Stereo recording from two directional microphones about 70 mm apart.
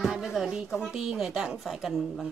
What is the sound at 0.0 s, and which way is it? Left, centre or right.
Speech, centre.